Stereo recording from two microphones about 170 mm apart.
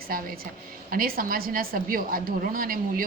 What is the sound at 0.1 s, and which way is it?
A woman's voice, 60° right (ahead or behind).